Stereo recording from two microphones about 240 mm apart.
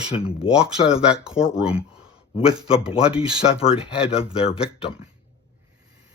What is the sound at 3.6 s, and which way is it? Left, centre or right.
Speech, left.